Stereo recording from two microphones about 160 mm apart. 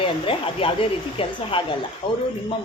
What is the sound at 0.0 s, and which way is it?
A man's voice, 35° left (ahead or behind).